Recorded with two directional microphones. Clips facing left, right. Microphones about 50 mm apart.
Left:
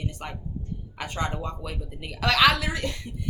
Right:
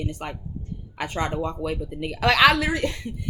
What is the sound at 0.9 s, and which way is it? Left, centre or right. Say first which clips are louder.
A woman's voice: right 4 dB; right.